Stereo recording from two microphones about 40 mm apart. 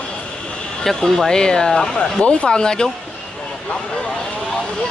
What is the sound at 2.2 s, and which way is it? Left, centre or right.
Speech, left.